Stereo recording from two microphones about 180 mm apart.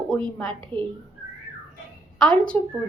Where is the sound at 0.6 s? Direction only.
25° right (ahead or behind).